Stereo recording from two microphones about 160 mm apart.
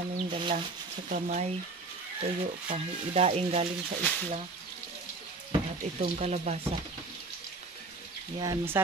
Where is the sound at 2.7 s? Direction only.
40° right (ahead or behind).